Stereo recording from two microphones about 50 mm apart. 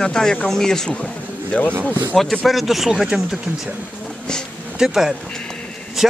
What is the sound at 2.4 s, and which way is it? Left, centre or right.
Speech, centre.